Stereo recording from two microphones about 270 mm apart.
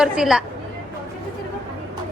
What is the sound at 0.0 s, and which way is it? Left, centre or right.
Speech, centre.